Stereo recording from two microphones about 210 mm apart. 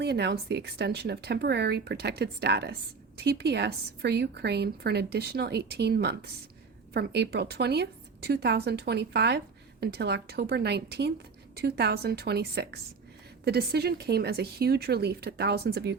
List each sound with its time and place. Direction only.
0.0 s a woman's voice: 50° right (ahead or behind)